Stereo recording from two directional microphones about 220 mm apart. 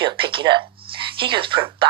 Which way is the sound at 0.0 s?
20° right (ahead or behind).